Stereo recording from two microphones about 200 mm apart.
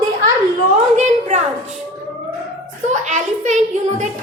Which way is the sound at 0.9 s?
35° right (ahead or behind).